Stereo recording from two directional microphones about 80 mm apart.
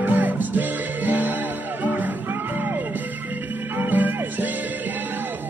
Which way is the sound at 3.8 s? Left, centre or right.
Right.